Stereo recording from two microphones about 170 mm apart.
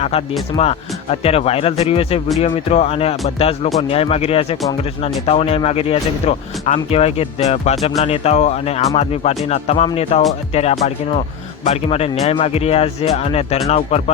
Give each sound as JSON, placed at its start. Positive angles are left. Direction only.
{"t": 0.5, "sound": "speech", "side_deg": 35}